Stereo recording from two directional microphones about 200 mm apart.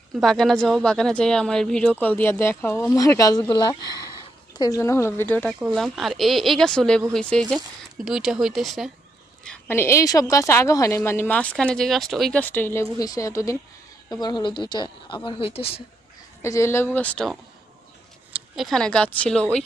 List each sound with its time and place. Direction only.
0.2 s a woman's voice: centre (ahead or behind)
5.5 s a woman's voice: 5° right (ahead or behind); by 15.8 s 30° left (ahead or behind)
16.4 s a woman's voice: 15° left (ahead or behind)